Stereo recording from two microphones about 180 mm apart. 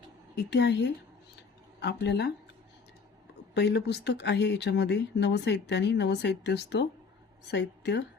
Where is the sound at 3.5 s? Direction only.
70° left (ahead or behind).